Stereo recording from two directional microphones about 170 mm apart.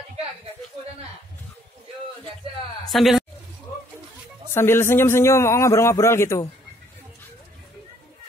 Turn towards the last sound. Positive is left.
turn(degrees=15)  # may be behind; listen again after turning